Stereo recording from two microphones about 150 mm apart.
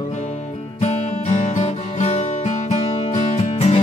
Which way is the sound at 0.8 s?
50° left (ahead or behind).